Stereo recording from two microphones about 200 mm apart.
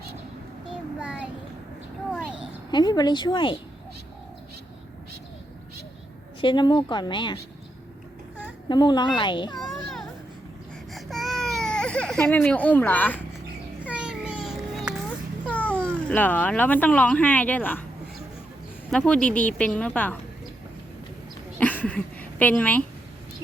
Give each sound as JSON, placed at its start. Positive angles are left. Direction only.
{"t": 0.9, "sound": "child singing", "side_deg": -5}
{"t": 2.0, "sound": "a sound", "side_deg": -5}
{"t": 2.7, "sound": "speech", "side_deg": 20}
{"t": 6.4, "sound": "a woman's voice", "side_deg": 25}
{"t": 8.7, "sound": "a woman's voice", "side_deg": 20}
{"t": 9.6, "sound": "children playing", "side_deg": 0}
{"t": 10.9, "sound": "baby cry", "side_deg": 0}
{"t": 13.8, "sound": "a sound", "side_deg": -5}
{"t": 15.4, "sound": "speech", "side_deg": 5}
{"t": 18.9, "sound": "speech", "side_deg": 5}
{"t": 21.6, "sound": "a sound", "side_deg": 5}